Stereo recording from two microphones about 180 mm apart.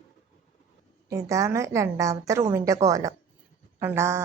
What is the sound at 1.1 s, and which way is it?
A woman's voice, 15° right (ahead or behind).